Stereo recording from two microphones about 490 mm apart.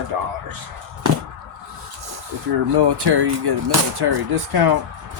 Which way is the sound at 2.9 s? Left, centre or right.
Right.